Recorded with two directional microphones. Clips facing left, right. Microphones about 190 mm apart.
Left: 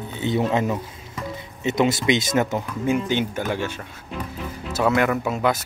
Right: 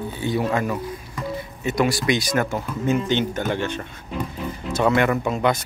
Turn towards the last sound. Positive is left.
turn(degrees=5)  # may be behind; listen again after turning